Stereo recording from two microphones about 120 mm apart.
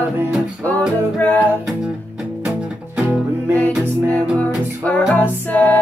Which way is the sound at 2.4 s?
10° right (ahead or behind).